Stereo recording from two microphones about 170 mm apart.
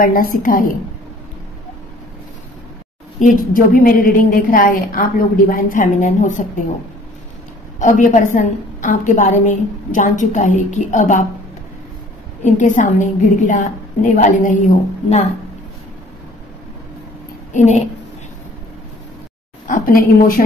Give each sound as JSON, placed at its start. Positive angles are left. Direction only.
{"t": 0.0, "sound": "a woman's voice", "side_deg": 60}
{"t": 3.2, "sound": "a woman's voice", "side_deg": 50}
{"t": 7.8, "sound": "a woman's voice", "side_deg": 50}
{"t": 12.4, "sound": "a woman's voice", "side_deg": 50}
{"t": 17.6, "sound": "a woman's voice", "side_deg": 40}
{"t": 19.7, "sound": "a woman's voice", "side_deg": 55}